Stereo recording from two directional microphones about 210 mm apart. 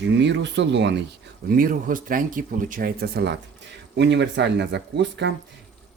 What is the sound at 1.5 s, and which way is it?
Speech, 40° right (ahead or behind).